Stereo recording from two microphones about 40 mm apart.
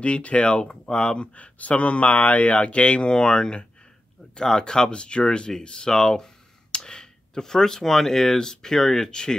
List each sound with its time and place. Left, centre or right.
0.0 s speech: left